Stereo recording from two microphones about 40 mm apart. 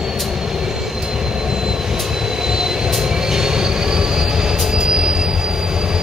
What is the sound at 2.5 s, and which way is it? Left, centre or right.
Train, centre.